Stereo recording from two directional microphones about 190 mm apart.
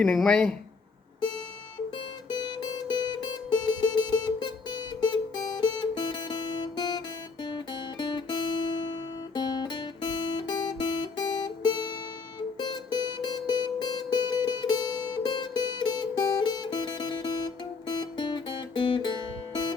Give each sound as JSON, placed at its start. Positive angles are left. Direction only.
{"t": 0.0, "sound": "speech", "side_deg": 5}
{"t": 2.3, "sound": "music", "side_deg": 20}
{"t": 7.4, "sound": "guitar", "side_deg": 25}
{"t": 12.5, "sound": "music", "side_deg": 20}